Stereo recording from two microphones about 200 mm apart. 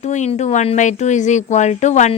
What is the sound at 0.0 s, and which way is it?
A woman's voice, 35° left (ahead or behind).